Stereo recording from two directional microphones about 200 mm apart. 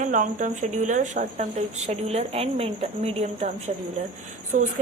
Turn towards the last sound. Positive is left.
turn(degrees=-40)  # may be behind; listen again after turning